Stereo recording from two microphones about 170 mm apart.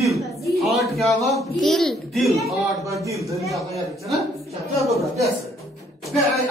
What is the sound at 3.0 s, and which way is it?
Speech, 20° right (ahead or behind).